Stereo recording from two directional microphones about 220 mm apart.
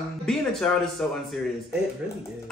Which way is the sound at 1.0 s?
5° left (ahead or behind).